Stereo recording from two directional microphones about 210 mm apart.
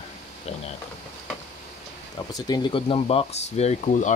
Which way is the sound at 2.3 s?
20° left (ahead or behind).